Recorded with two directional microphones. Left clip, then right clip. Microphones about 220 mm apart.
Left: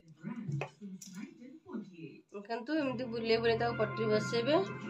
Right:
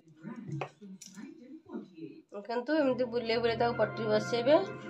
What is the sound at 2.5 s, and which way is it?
Speech, 25° right (ahead or behind).